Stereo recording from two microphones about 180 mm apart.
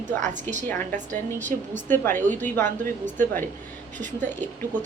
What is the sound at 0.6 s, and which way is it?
A woman's voice, 10° left (ahead or behind).